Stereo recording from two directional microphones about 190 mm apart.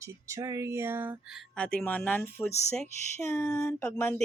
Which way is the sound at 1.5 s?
5° left (ahead or behind).